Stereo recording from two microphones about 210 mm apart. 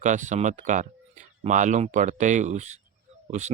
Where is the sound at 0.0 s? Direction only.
35° right (ahead or behind).